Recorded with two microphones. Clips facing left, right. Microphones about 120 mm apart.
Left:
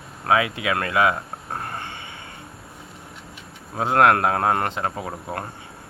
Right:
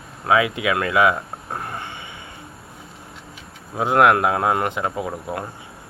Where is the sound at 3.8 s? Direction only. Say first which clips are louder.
Right 1 dB; 20° right (ahead or behind).